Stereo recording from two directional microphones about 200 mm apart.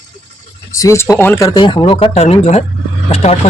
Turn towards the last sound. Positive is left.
turn(degrees=30)  # may be behind; listen again after turning